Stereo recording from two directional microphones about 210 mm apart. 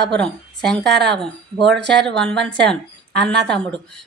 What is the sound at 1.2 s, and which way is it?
A woman's voice, centre (ahead or behind).